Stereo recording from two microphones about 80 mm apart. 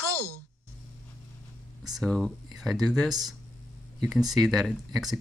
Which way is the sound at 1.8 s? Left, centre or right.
Centre.